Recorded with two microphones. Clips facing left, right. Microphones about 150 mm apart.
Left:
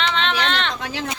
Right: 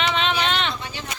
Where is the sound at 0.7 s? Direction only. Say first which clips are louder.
Left 5 dB; 90° left.